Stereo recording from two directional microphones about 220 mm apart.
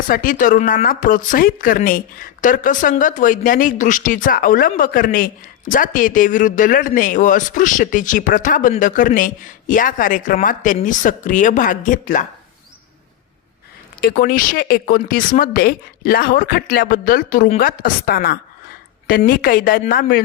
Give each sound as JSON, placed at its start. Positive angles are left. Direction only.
{"t": 0.1, "sound": "speech", "side_deg": 40}
{"t": 14.0, "sound": "speech", "side_deg": 40}